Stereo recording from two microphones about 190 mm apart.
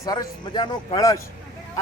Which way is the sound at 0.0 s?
20° left (ahead or behind).